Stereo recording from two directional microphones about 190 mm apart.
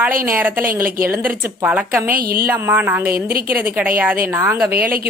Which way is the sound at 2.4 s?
10° right (ahead or behind).